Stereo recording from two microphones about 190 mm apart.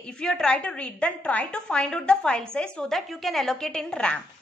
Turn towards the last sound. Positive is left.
turn(degrees=5)  # may be behind; listen again after turning